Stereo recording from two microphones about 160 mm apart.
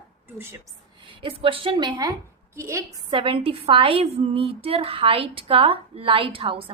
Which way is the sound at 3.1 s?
35° right (ahead or behind).